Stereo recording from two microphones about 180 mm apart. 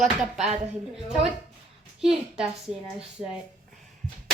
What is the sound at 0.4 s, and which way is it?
Speech, 35° right (ahead or behind).